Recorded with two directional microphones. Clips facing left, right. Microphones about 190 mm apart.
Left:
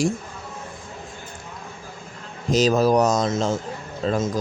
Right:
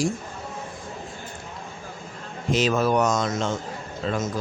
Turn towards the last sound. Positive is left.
turn(degrees=35)  # may be behind; listen again after turning